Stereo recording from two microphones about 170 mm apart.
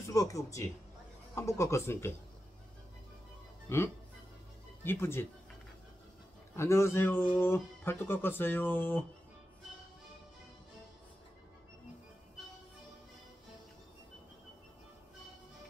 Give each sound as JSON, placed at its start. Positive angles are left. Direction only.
{"t": 0.1, "sound": "speech", "side_deg": 20}
{"t": 3.6, "sound": "speech", "side_deg": 15}
{"t": 6.5, "sound": "speech", "side_deg": 15}